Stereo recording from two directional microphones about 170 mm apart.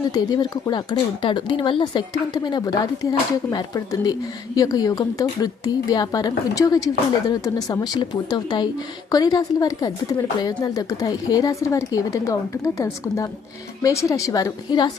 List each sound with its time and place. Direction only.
0.1 s speech: 20° left (ahead or behind)